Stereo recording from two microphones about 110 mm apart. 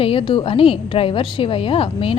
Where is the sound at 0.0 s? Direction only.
55° left (ahead or behind).